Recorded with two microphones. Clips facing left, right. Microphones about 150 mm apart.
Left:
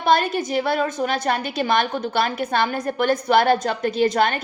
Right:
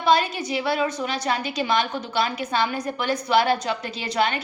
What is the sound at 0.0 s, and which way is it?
A woman's voice, 55° left (ahead or behind).